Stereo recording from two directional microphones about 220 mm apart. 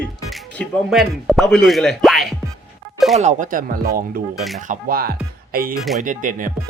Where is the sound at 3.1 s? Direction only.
30° right (ahead or behind).